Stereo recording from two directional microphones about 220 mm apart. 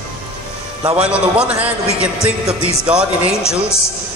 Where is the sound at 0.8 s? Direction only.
5° right (ahead or behind).